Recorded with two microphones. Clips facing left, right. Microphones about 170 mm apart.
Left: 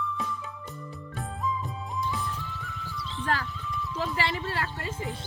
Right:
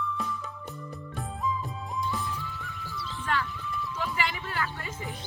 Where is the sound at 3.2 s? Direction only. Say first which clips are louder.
Left 1 dB; 35° left (ahead or behind).